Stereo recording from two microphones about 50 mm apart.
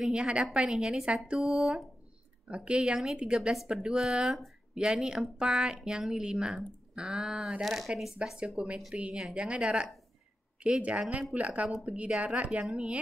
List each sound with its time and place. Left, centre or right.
0.1 s speech: right
1.0 s speech: centre
1.4 s speech: centre
2.5 s speech: right
2.8 s speech: centre
8.2 s speech: right